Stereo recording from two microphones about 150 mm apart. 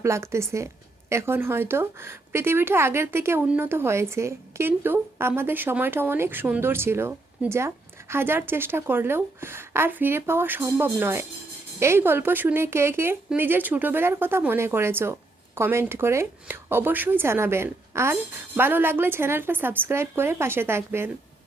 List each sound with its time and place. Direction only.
0.0 s a woman's voice: 20° right (ahead or behind)